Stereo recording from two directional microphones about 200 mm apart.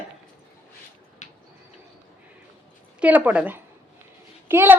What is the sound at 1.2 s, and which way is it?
Bird, 40° left (ahead or behind).